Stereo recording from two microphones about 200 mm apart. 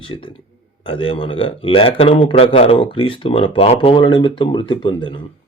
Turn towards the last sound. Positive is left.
turn(degrees=25)  # may be behind; listen again after turning